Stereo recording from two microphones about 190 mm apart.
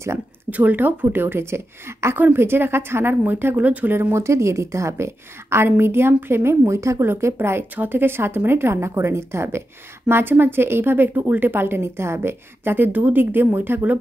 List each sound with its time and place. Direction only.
0.0 s speech: 10° right (ahead or behind)